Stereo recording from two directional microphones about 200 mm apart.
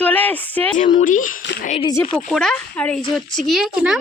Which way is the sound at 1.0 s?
40° left (ahead or behind).